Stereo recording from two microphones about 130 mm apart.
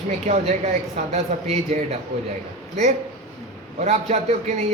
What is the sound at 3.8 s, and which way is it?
Speech, 60° right (ahead or behind).